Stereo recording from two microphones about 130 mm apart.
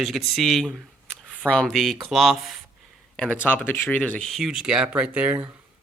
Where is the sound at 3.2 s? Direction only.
10° left (ahead or behind).